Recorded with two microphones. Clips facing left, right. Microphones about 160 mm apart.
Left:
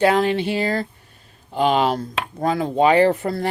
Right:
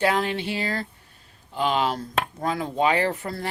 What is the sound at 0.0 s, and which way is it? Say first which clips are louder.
Speech: left 6 dB; 30° left (ahead or behind).